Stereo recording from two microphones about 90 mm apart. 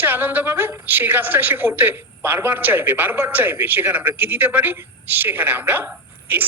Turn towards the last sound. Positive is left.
turn(degrees=-20)  # may be behind; listen again after turning